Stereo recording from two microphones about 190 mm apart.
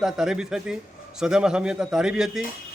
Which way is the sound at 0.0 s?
5° right (ahead or behind).